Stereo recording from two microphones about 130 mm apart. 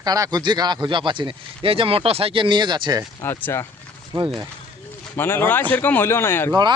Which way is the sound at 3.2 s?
20° left (ahead or behind).